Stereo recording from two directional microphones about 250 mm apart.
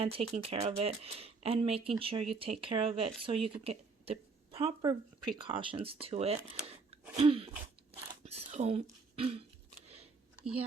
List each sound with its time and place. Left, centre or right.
0.0 s speech: right